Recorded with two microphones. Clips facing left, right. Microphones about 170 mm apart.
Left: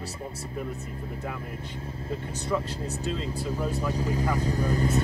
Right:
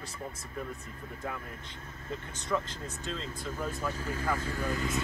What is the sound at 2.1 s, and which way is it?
Speech, 30° left (ahead or behind).